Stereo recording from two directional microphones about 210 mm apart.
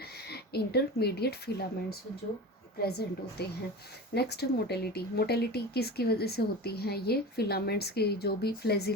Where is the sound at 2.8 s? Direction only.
50° left (ahead or behind).